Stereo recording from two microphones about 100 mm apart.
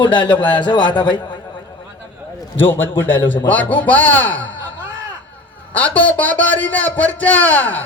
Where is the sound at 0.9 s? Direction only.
50° left (ahead or behind).